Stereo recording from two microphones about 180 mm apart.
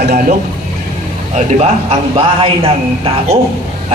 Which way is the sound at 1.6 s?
30° right (ahead or behind).